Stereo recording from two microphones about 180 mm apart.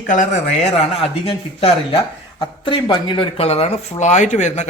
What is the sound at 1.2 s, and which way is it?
Speech, 35° left (ahead or behind).